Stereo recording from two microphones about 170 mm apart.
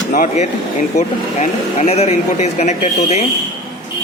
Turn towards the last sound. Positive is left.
turn(degrees=40)  # may be behind; listen again after turning